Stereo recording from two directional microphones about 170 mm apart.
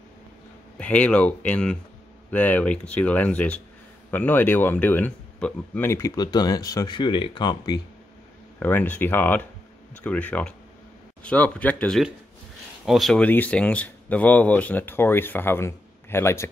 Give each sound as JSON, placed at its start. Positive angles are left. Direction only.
{"t": 0.7, "sound": "speech", "side_deg": 10}
{"t": 8.5, "sound": "speech", "side_deg": 10}